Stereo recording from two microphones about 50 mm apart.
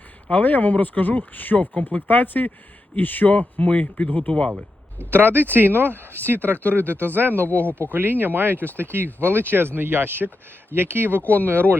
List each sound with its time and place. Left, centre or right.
0.3 s speech: left; by 4.5 s centre
5.1 s speech: right
7.6 s speech: left
8.2 s speech: right